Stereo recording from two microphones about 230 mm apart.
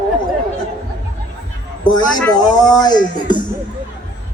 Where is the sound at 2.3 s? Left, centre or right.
Centre.